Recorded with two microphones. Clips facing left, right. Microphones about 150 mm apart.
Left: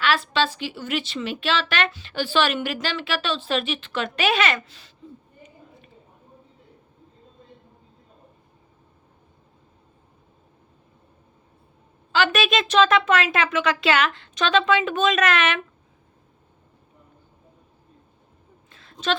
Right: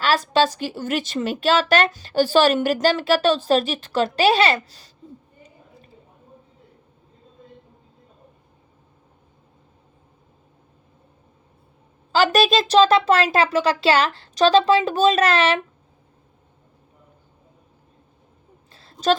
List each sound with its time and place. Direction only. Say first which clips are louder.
0.0 s a woman's voice: right 4 dB; 40° right (ahead or behind)
12.1 s a woman's voice: right 4 dB; 35° right (ahead or behind)
18.7 s a sound: right 7 dB; 35° right (ahead or behind)